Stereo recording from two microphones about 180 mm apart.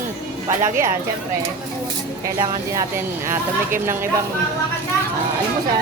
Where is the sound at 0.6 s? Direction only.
15° right (ahead or behind).